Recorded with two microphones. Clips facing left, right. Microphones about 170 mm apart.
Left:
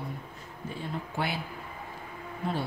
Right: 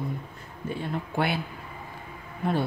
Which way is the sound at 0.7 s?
65° right (ahead or behind).